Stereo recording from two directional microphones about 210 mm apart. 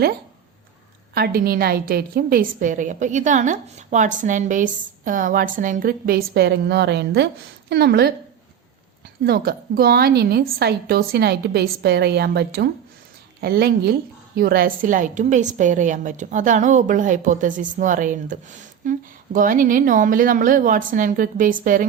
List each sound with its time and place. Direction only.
1.1 s a woman's voice: 45° right (ahead or behind)
9.2 s a woman's voice: 50° right (ahead or behind)